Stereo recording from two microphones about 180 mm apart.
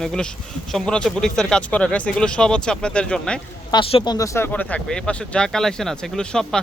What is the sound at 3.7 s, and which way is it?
Speech, 25° left (ahead or behind).